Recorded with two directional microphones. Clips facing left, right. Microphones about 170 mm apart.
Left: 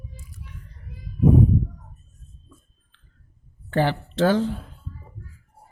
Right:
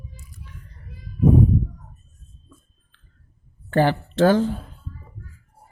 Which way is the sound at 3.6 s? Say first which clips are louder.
Right 3 dB; 50° right (ahead or behind).